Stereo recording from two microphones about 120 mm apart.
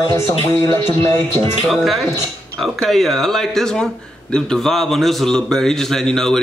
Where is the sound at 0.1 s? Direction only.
25° left (ahead or behind).